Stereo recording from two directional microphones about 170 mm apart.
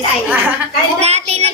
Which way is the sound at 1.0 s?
40° right (ahead or behind).